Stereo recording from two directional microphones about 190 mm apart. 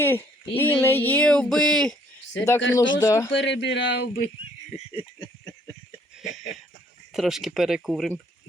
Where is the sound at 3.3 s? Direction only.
70° left (ahead or behind).